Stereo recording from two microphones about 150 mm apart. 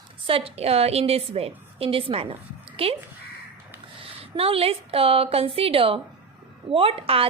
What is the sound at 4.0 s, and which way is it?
A woman's voice, 40° right (ahead or behind).